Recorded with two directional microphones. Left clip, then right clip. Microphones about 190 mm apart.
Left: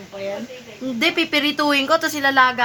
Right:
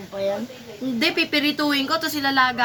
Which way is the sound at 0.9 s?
30° left (ahead or behind).